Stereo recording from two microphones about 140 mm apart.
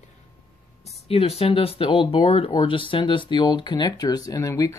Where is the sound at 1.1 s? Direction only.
45° left (ahead or behind).